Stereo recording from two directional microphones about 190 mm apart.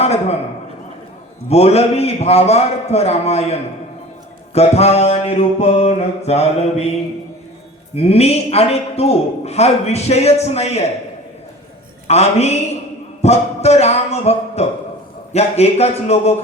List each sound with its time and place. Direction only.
0.0 s a man's voice: 35° left (ahead or behind)
1.5 s a man's voice: 35° left (ahead or behind)
7.9 s a man's voice: 35° left (ahead or behind)
12.0 s a man's voice: 35° left (ahead or behind)
13.2 s a sound: 35° left (ahead or behind)
15.3 s a man's voice: 35° left (ahead or behind)